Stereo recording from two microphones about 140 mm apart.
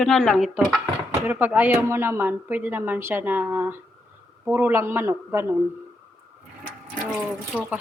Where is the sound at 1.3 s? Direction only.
10° right (ahead or behind).